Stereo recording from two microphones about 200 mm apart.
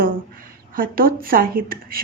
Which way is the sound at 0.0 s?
45° right (ahead or behind).